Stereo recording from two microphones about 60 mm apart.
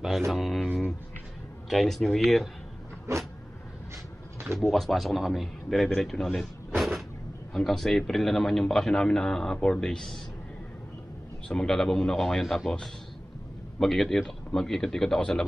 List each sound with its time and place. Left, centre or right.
0.3 s a man's voice: centre
1.7 s a man's voice: centre
3.1 s vehicle: right
4.6 s a man's voice: centre
6.8 s vehicle: centre
7.5 s a man's voice: centre
11.4 s a man's voice: centre
13.7 s a man's voice: centre